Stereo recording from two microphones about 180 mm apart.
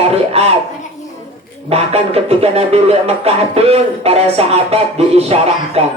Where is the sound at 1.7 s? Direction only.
35° right (ahead or behind).